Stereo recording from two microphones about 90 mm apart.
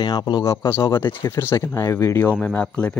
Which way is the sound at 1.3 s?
30° left (ahead or behind).